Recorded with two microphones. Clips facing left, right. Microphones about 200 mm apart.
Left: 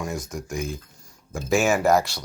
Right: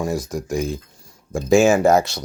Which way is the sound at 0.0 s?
35° right (ahead or behind).